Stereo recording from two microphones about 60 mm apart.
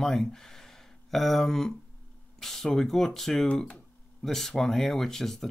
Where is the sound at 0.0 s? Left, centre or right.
Centre.